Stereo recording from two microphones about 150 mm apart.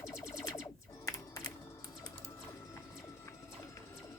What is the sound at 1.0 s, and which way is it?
Computer keyboard, 20° left (ahead or behind).